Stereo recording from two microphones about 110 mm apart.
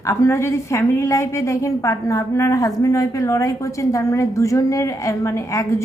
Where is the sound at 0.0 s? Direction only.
30° left (ahead or behind).